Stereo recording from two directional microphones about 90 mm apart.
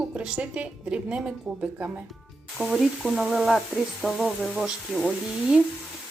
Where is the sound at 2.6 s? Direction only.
Centre (ahead or behind).